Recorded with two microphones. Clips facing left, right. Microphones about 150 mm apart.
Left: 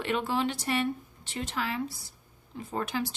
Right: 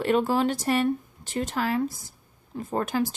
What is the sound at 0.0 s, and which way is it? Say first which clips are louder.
Speech: right 6 dB; 40° right (ahead or behind).